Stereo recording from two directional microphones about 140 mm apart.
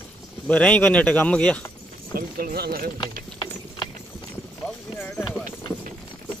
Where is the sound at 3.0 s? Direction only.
30° left (ahead or behind).